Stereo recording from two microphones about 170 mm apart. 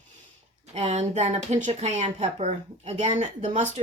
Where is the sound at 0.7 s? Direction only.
40° right (ahead or behind).